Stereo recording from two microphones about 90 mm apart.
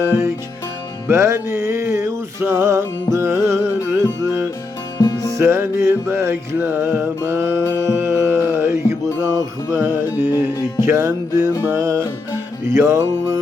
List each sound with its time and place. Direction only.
0.0 s music: 30° right (ahead or behind)
4.9 s music: 35° left (ahead or behind)
5.3 s music: 30° right (ahead or behind)